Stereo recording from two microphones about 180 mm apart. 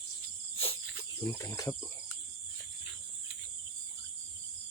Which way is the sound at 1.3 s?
15° left (ahead or behind).